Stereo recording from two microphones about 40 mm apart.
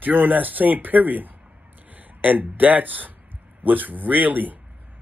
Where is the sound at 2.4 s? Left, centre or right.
Right.